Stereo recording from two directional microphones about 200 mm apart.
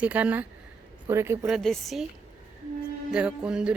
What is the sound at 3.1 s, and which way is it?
Speech, 5° right (ahead or behind).